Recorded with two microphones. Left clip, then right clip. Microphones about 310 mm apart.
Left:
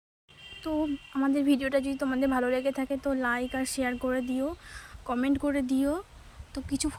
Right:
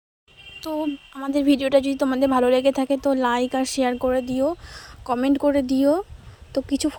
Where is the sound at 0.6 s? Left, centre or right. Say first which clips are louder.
Right 4 dB; right.